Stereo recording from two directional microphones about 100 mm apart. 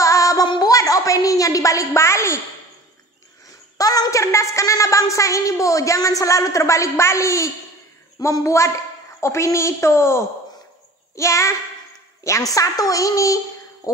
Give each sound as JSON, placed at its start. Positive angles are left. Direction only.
{"t": 0.0, "sound": "synthetic singing", "side_deg": 35}
{"t": 0.5, "sound": "a woman's voice", "side_deg": 40}
{"t": 3.7, "sound": "a woman's voice", "side_deg": 35}